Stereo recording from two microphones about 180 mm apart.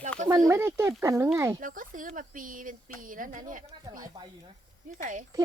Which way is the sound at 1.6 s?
50° right (ahead or behind).